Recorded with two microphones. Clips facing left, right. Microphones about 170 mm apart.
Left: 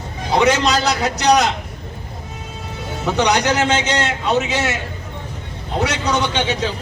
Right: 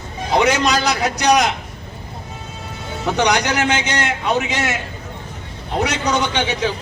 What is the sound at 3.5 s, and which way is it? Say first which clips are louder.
Speech: left 2 dB; 25° left (ahead or behind).